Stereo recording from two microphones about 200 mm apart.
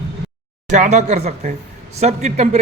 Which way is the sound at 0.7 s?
35° right (ahead or behind).